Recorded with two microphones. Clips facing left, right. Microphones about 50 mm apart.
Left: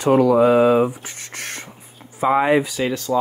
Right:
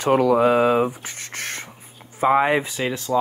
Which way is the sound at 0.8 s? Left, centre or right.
Right.